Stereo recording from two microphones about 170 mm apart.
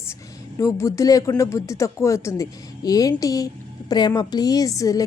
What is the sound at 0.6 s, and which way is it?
Speech, 20° left (ahead or behind).